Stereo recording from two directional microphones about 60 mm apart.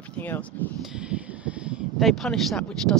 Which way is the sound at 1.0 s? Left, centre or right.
Centre.